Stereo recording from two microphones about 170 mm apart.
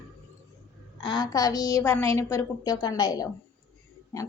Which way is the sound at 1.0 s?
25° left (ahead or behind).